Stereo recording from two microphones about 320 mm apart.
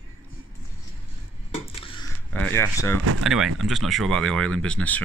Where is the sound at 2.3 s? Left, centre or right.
Centre.